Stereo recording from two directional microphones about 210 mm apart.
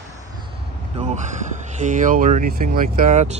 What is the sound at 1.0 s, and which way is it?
Speech, 35° right (ahead or behind).